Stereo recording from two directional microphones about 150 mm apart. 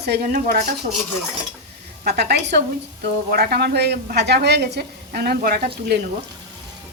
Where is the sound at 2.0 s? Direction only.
90° right.